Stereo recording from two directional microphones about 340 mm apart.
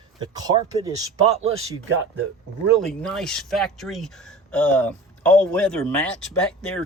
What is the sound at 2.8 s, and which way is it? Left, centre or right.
Speech, centre.